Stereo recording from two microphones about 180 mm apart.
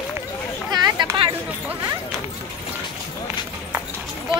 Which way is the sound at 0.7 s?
25° right (ahead or behind).